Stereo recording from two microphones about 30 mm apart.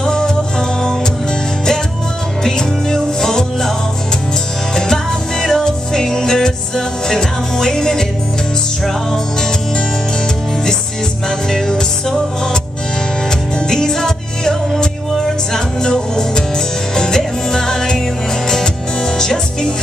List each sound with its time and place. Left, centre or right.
0.0 s music: left
2.4 s music: left
4.7 s music: left
11.2 s music: left
13.6 s music: left